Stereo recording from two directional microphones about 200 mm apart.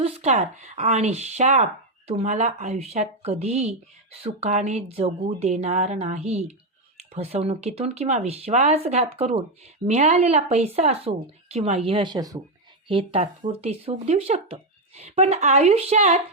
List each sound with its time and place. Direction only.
0.0 s speech: 35° right (ahead or behind)